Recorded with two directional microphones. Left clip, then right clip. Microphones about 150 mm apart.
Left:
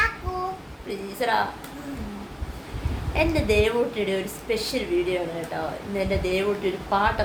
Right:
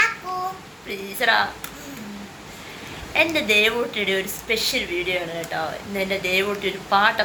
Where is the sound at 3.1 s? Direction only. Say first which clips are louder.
Right 4 dB; 10° left (ahead or behind).